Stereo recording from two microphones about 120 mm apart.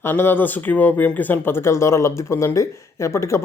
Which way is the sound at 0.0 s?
20° left (ahead or behind).